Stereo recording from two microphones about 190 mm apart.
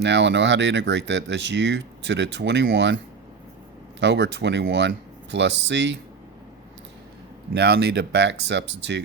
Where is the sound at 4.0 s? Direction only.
65° right (ahead or behind).